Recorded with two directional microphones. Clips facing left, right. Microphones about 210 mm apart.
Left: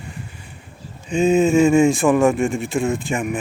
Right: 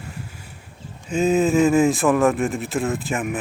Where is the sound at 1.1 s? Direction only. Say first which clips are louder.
Left 3 dB; centre (ahead or behind).